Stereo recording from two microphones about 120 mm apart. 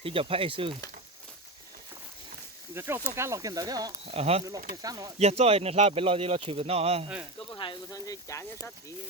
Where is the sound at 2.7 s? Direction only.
20° right (ahead or behind).